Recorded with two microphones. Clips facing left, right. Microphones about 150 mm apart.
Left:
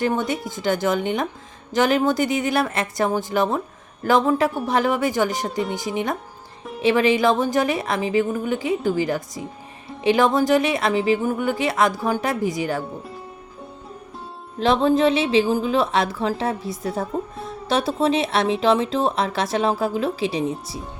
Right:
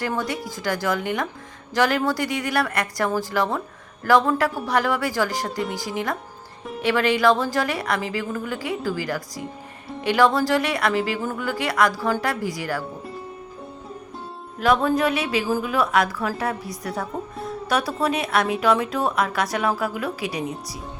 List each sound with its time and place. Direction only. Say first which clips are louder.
0.0 s speech: left 4 dB; 25° left (ahead or behind)
5.5 s speech: left 2 dB; centre (ahead or behind)
5.7 s speech: left 2 dB; 20° left (ahead or behind)
14.6 s speech: left 2 dB; 25° left (ahead or behind)
17.1 s speech: left 3 dB; centre (ahead or behind)
17.7 s speech: left 3 dB; 25° left (ahead or behind)